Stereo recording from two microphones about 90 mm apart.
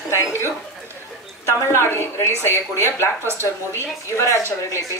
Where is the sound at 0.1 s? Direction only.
30° left (ahead or behind).